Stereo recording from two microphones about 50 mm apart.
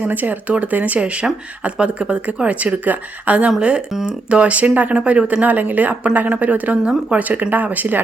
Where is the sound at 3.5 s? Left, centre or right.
Centre.